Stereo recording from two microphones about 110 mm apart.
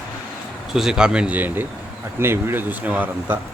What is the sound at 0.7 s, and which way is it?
Speech, 5° right (ahead or behind).